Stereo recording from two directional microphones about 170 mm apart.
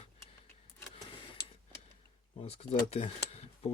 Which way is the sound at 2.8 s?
35° left (ahead or behind).